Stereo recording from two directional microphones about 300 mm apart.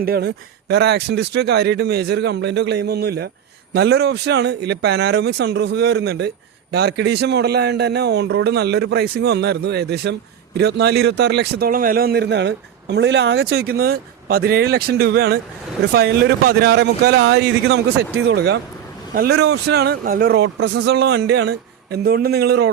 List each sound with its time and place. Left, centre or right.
0.0 s speech: right